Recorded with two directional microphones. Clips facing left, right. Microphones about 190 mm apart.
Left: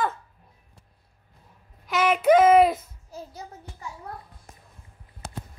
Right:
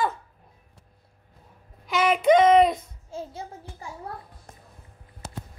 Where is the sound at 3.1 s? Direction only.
25° right (ahead or behind).